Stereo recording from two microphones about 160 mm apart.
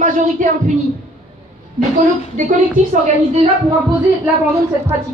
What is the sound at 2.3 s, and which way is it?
Speech, 50° right (ahead or behind).